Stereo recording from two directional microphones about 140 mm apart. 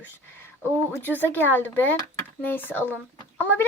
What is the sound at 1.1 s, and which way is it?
Speech, 15° left (ahead or behind).